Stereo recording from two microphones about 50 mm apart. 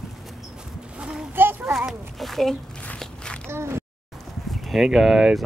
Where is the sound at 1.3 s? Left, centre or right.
Right.